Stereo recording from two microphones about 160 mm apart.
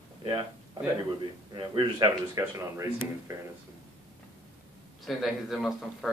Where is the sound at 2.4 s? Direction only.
15° right (ahead or behind).